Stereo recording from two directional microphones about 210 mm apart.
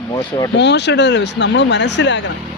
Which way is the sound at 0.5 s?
55° left (ahead or behind).